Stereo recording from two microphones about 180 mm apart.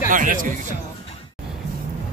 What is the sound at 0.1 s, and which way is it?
Speech, 45° right (ahead or behind).